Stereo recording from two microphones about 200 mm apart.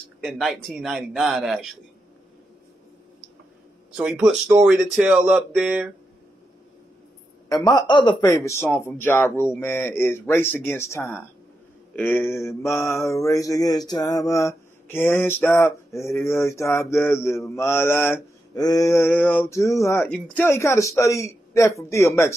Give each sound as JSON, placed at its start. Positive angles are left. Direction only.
{"t": 0.2, "sound": "speech", "side_deg": 0}
{"t": 3.9, "sound": "speech", "side_deg": -5}
{"t": 7.4, "sound": "a man's voice", "side_deg": 20}
{"t": 8.6, "sound": "mantra", "side_deg": 10}